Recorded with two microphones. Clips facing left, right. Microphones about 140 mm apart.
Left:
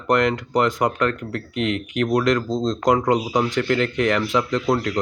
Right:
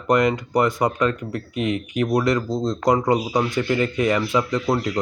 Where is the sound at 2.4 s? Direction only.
10° right (ahead or behind).